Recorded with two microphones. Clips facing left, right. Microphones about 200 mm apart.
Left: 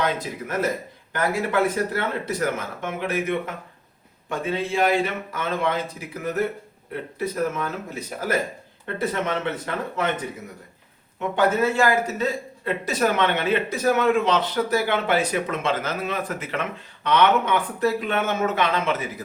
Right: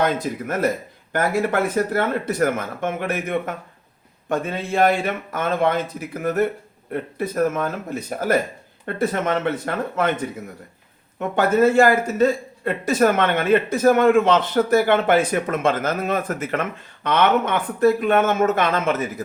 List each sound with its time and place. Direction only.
0.0 s a man's voice: 50° right (ahead or behind)
11.3 s a man's voice: 50° right (ahead or behind)